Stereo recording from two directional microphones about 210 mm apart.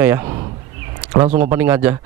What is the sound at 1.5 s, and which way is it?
Speech, 10° right (ahead or behind).